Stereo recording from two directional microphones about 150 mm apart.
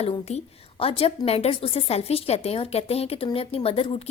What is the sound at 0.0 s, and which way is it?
A woman's voice, 45° left (ahead or behind).